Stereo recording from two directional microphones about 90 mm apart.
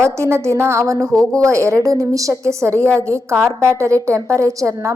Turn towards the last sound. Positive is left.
turn(degrees=-35)  # may be behind; listen again after turning